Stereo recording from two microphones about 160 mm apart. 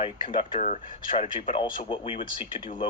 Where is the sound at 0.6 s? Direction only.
50° left (ahead or behind).